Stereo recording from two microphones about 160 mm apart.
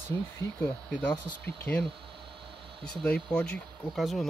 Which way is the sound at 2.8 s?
5° left (ahead or behind).